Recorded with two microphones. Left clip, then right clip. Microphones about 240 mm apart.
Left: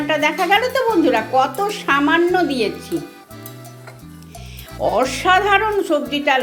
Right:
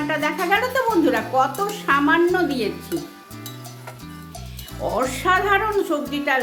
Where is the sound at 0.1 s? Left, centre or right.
Centre.